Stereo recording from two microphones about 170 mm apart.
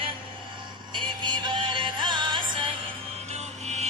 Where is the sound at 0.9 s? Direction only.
25° right (ahead or behind).